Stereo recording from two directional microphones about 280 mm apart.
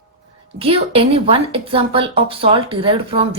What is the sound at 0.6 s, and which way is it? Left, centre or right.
A woman's voice, centre.